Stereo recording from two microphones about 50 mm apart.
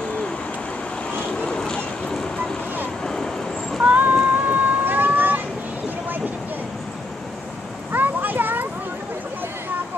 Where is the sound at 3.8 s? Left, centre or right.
Right.